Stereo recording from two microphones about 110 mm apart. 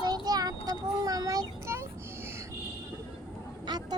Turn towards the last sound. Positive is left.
turn(degrees=-40)  # may be behind; listen again after turning